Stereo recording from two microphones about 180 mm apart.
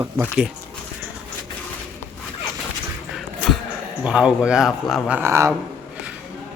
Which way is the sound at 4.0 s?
5° right (ahead or behind).